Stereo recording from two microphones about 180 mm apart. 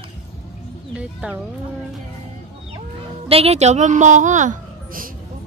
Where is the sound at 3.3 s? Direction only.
35° right (ahead or behind).